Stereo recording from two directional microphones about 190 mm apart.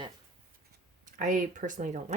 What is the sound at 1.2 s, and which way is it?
Speech, 45° right (ahead or behind).